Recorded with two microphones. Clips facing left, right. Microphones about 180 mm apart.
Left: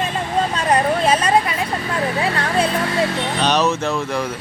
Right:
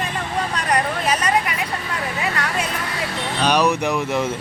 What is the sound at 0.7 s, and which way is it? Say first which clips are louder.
Speech: left 5 dB; 30° left (ahead or behind).